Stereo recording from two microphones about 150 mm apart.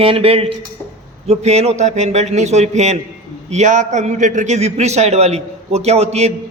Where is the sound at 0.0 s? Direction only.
40° right (ahead or behind).